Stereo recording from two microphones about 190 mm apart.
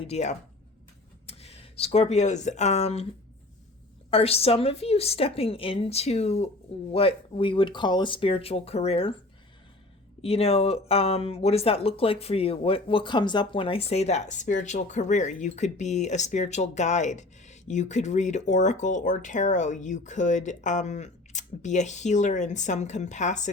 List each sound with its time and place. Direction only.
0.0 s speech: 35° left (ahead or behind)
4.1 s speech: 30° left (ahead or behind)
10.2 s speech: 30° left (ahead or behind)